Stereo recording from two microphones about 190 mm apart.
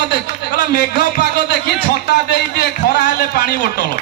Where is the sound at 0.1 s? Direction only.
55° left (ahead or behind).